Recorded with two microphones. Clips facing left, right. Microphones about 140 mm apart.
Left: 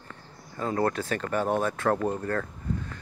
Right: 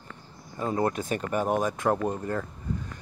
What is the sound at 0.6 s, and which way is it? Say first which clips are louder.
Speech: even; 15° right (ahead or behind).